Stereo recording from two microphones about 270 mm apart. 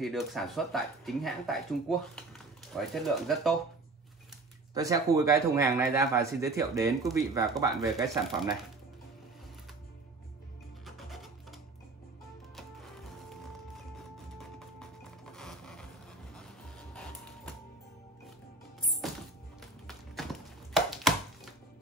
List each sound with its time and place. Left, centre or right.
0.0 s speech: centre
4.7 s speech: centre
10.9 s music: centre
12.5 s music: centre
16.3 s printer: centre
18.8 s music: centre
20.7 s chopping: centre